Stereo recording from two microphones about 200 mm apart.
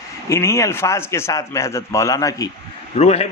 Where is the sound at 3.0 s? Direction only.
30° left (ahead or behind).